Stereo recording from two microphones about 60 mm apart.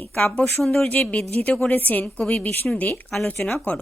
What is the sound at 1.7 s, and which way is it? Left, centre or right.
Speech, left.